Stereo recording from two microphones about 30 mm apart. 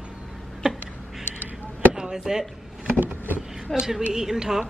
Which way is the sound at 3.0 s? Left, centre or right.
Right.